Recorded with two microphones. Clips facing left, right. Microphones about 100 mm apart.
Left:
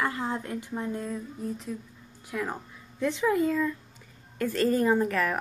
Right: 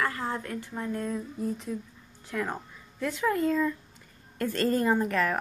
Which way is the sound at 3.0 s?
20° left (ahead or behind).